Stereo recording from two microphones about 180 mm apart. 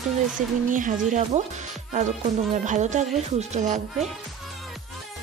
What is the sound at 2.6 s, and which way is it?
Speech, 40° right (ahead or behind).